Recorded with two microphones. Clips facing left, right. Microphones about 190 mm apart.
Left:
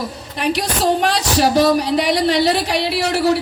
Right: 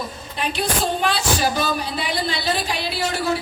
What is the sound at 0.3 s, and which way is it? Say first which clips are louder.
Speech: left 4 dB; 75° left (ahead or behind).